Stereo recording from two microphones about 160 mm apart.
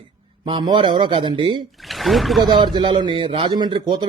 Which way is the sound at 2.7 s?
30° right (ahead or behind).